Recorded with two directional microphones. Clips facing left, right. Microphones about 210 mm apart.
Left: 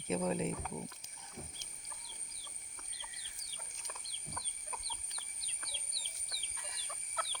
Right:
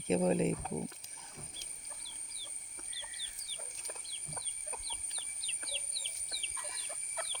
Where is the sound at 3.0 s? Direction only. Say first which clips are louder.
Right 1 dB; 35° right (ahead or behind).